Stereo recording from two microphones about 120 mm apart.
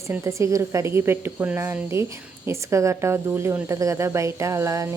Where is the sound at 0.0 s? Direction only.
25° right (ahead or behind).